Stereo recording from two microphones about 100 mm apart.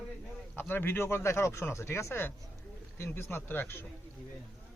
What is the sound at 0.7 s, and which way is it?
Speech, 20° left (ahead or behind).